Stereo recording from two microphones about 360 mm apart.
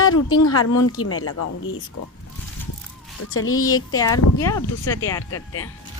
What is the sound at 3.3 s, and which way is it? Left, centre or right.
Speech, left.